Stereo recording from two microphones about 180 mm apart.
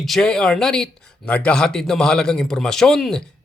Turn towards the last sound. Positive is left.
turn(degrees=5)  # may be behind; listen again after turning